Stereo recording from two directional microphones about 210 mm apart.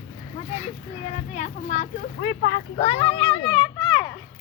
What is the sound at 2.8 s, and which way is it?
Speech, 30° left (ahead or behind).